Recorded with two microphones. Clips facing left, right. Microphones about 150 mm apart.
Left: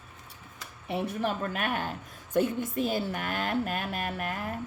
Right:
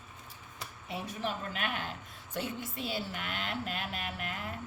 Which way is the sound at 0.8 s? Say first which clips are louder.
Left 7 dB; 60° left (ahead or behind).